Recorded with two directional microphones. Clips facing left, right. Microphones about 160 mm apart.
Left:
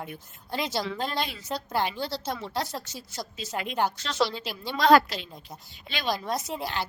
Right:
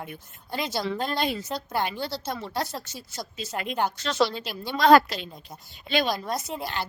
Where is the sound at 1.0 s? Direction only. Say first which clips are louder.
Right 3 dB; 50° right (ahead or behind).